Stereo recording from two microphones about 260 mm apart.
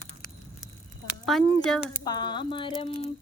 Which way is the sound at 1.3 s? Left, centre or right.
Centre.